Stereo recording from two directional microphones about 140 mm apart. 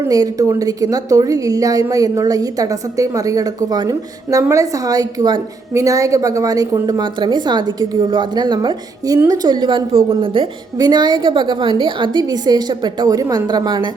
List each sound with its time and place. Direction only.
0.1 s a woman's voice: 25° right (ahead or behind)